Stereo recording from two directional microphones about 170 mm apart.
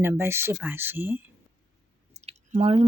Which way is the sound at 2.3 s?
35° right (ahead or behind).